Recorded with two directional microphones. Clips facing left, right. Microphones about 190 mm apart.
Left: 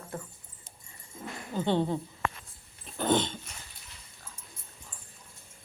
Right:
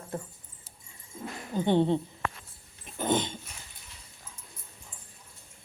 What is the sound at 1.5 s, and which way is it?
Speech, 20° right (ahead or behind).